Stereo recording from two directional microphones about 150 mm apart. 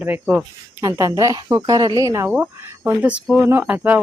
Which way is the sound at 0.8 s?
20° right (ahead or behind).